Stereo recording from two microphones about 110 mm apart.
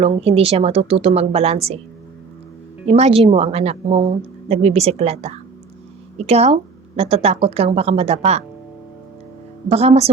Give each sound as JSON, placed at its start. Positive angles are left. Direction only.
{"t": 0.0, "sound": "a woman's voice", "side_deg": -65}
{"t": 2.8, "sound": "a woman's voice", "side_deg": -65}
{"t": 9.6, "sound": "speech", "side_deg": -70}